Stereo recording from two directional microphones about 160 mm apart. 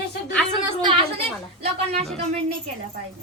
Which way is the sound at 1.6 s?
40° right (ahead or behind).